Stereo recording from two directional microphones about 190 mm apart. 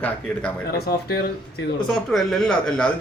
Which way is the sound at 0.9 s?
55° left (ahead or behind).